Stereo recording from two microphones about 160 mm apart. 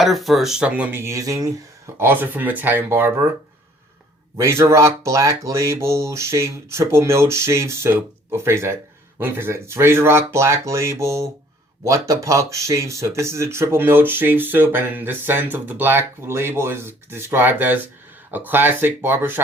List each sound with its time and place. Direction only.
0.0 s speech: centre (ahead or behind)
4.4 s speech: 15° right (ahead or behind)